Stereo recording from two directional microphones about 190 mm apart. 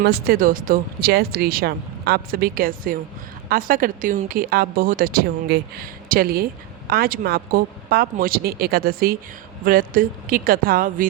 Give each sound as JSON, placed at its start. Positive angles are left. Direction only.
{"t": 0.0, "sound": "a woman's voice", "side_deg": -55}